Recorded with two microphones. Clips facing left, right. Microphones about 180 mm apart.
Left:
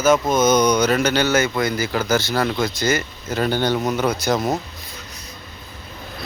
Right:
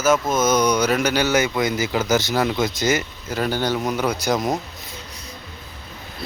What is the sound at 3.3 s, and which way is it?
Speech, 5° right (ahead or behind).